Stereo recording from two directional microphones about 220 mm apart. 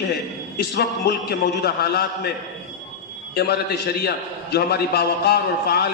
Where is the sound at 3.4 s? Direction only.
45° left (ahead or behind).